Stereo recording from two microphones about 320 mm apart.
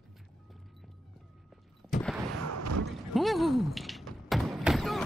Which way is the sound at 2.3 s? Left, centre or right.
Right.